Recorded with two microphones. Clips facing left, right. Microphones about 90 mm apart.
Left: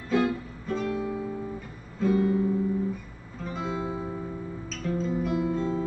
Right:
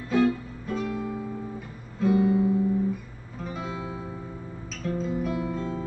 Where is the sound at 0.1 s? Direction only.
Centre (ahead or behind).